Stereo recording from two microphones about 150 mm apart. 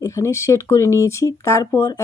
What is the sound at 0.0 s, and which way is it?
Speech, 20° left (ahead or behind).